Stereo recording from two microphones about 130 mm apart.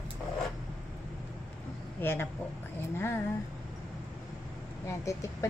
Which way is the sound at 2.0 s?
15° left (ahead or behind).